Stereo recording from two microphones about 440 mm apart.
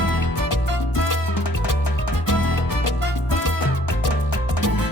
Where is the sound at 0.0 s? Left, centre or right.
Left.